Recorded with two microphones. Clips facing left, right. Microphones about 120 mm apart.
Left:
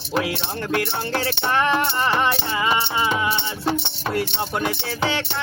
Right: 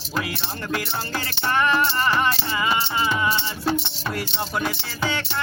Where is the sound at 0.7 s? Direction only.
60° left (ahead or behind).